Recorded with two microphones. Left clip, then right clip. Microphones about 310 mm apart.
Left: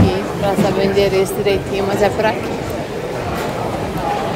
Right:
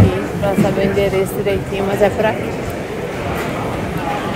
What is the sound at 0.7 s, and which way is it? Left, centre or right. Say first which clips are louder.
Speech: left 1 dB; centre.